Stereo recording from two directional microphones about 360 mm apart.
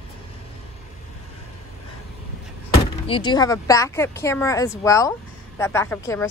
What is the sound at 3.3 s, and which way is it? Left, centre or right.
Speech, centre.